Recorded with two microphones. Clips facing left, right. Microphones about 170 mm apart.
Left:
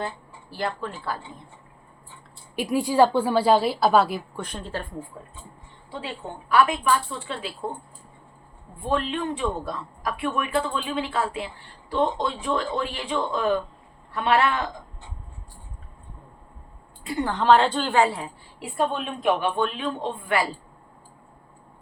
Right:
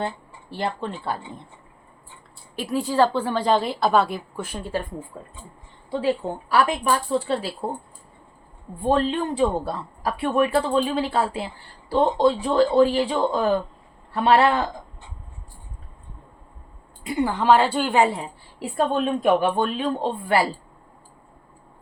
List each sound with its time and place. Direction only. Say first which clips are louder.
0.5 s speech: right 2 dB; 25° right (ahead or behind)
2.6 s a woman's voice: left 1 dB; 15° left (ahead or behind); by 4.8 s 10° right (ahead or behind)
6.5 s speech: even; 35° right (ahead or behind)
8.8 s speech: right 5 dB; 35° right (ahead or behind)
17.1 s a woman's voice: right 1 dB; 10° right (ahead or behind)
18.9 s speech: right 5 dB; 40° right (ahead or behind)